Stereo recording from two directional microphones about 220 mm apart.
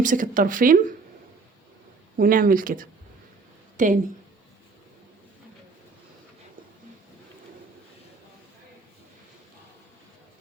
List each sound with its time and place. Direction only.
0.0 s speech: 35° right (ahead or behind)
2.1 s speech: 40° right (ahead or behind)